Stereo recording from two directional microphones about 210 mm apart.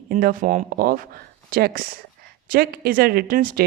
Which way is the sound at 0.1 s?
40° right (ahead or behind).